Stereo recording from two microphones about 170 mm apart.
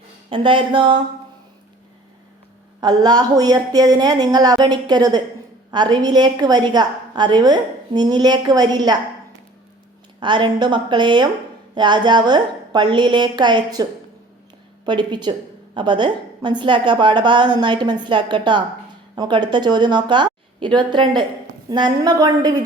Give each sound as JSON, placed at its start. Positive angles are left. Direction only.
{"t": 0.3, "sound": "a woman's voice", "side_deg": -30}
{"t": 2.8, "sound": "a woman's voice", "side_deg": -25}
{"t": 10.2, "sound": "a woman's voice", "side_deg": -30}
{"t": 14.8, "sound": "a woman's voice", "side_deg": -25}